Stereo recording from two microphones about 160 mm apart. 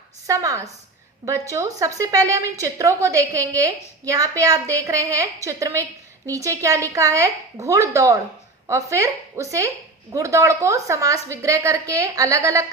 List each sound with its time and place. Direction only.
0.3 s a woman's voice: 20° right (ahead or behind)